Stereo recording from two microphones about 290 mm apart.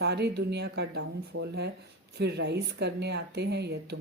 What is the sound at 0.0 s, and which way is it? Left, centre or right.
Speech, right.